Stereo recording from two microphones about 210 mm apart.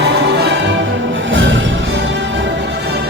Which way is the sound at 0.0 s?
55° right (ahead or behind).